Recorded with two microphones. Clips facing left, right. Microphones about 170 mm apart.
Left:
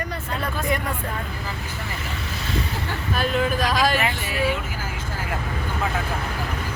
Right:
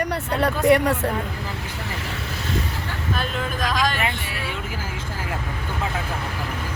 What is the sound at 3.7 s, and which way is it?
Speech, 5° left (ahead or behind).